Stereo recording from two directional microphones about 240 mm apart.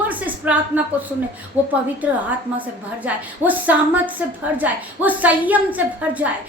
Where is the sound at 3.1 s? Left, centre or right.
Centre.